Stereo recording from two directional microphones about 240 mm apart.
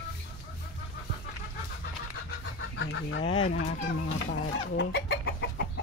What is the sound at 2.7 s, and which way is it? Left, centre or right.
Fowl, left.